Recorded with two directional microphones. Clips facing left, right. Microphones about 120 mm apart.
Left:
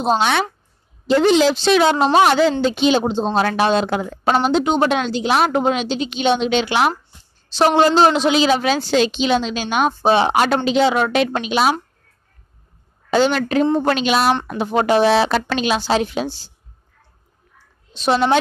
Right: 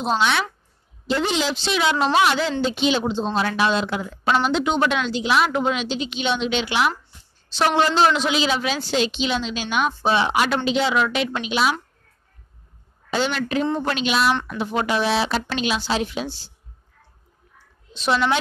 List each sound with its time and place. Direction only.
0.0 s a woman's voice: 45° left (ahead or behind)
13.1 s a woman's voice: 40° left (ahead or behind)